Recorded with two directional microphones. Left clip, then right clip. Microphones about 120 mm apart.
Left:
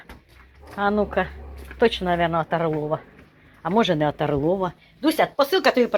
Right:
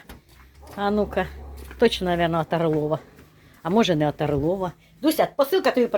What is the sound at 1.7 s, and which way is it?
Speech, 55° right (ahead or behind).